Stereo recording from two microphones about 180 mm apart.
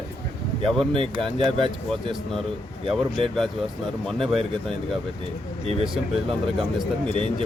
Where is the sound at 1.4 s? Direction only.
25° right (ahead or behind).